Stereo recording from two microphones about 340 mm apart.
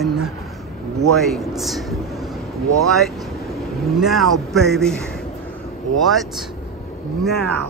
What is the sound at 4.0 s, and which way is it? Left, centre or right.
Speech, centre.